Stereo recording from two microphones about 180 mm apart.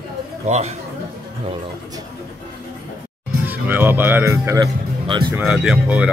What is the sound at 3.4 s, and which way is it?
Speech, 10° right (ahead or behind).